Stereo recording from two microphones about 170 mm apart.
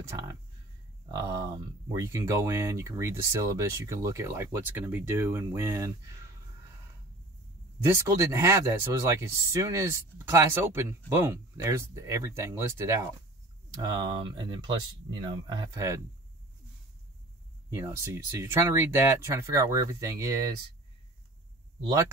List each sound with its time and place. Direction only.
1.0 s speech: 20° right (ahead or behind)
7.8 s speech: 15° right (ahead or behind)
17.7 s speech: 15° right (ahead or behind)